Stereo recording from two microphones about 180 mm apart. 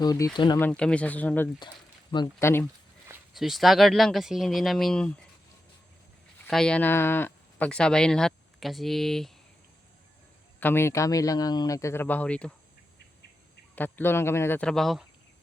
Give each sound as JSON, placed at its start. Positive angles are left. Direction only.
{"t": 0.0, "sound": "speech", "side_deg": 20}
{"t": 0.6, "sound": "speech", "side_deg": 5}
{"t": 1.5, "sound": "speech", "side_deg": 25}
{"t": 2.4, "sound": "speech", "side_deg": 15}
{"t": 3.3, "sound": "speech", "side_deg": 0}
{"t": 6.4, "sound": "speech", "side_deg": 5}
{"t": 10.6, "sound": "speech", "side_deg": 10}
{"t": 13.7, "sound": "speech", "side_deg": 10}